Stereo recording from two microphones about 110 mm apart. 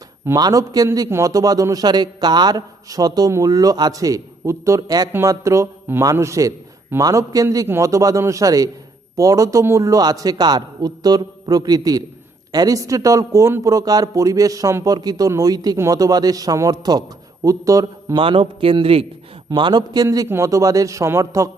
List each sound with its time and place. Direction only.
0.3 s a man's voice: 35° right (ahead or behind)
18.2 s a man's voice: 55° right (ahead or behind)
19.5 s a man's voice: 45° right (ahead or behind)
20.2 s a man's voice: 25° right (ahead or behind)